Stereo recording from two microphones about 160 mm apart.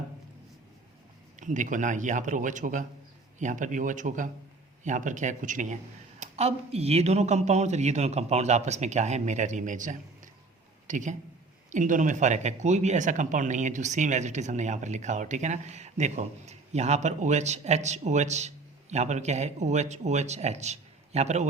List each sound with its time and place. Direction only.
1.4 s speech: 50° right (ahead or behind)